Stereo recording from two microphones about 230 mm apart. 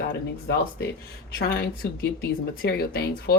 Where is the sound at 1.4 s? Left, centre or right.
Left.